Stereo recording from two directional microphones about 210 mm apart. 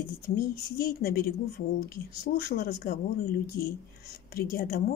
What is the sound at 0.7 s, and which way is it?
Speech, 45° left (ahead or behind).